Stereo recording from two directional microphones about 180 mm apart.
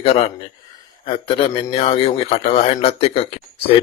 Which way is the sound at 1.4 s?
30° left (ahead or behind).